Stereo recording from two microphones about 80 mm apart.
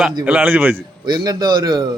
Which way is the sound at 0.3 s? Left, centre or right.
Right.